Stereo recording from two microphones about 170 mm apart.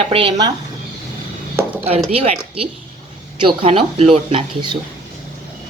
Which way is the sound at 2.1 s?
35° right (ahead or behind).